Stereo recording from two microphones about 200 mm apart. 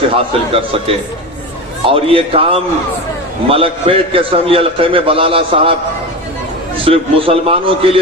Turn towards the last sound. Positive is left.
turn(degrees=-25)  # may be behind; listen again after turning